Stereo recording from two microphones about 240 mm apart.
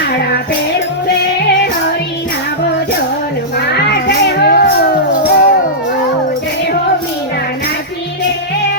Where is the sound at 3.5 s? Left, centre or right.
Left.